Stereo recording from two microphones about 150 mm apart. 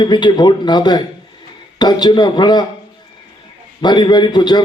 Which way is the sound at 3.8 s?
30° left (ahead or behind).